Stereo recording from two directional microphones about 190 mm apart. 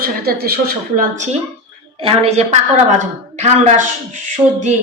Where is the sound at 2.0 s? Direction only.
30° right (ahead or behind).